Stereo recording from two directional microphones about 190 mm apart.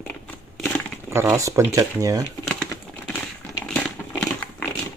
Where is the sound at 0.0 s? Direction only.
10° left (ahead or behind).